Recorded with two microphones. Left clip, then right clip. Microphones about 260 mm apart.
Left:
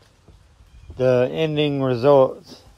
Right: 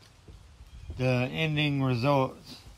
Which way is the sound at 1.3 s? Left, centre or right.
Right.